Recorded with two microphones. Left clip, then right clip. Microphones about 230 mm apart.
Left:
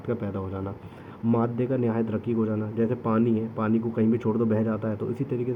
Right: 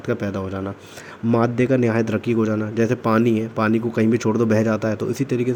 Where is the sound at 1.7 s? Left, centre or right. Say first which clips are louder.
Right 7 dB; right.